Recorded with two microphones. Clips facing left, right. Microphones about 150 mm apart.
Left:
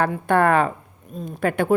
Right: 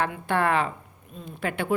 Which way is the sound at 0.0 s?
45° left (ahead or behind).